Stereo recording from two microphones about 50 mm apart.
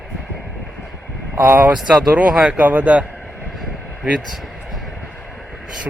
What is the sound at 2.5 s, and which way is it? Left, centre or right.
Speech, right.